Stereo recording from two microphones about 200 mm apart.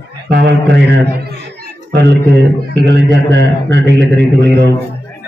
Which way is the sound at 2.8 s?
60° right (ahead or behind).